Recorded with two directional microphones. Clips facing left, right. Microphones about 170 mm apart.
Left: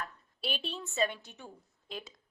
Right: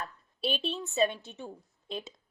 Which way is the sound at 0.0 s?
25° right (ahead or behind).